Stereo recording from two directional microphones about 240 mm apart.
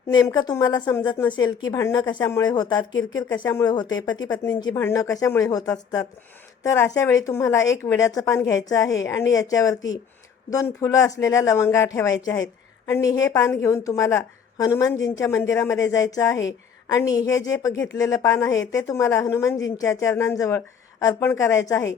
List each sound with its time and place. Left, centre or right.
0.1 s a woman's voice: centre